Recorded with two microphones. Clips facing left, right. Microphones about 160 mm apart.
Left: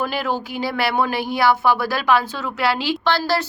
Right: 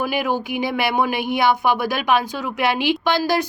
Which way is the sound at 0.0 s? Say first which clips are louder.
Right 1 dB; 15° right (ahead or behind).